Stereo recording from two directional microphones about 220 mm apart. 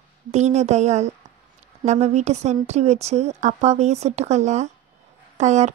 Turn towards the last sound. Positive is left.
turn(degrees=-30)  # may be behind; listen again after turning